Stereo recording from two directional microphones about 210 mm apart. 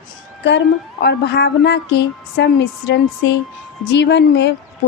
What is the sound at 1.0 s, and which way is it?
A woman's voice, 50° left (ahead or behind).